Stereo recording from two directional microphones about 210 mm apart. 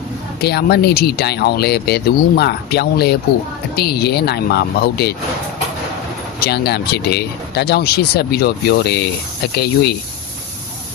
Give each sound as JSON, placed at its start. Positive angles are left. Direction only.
{"t": 0.4, "sound": "speech", "side_deg": 50}
{"t": 6.4, "sound": "speech", "side_deg": 50}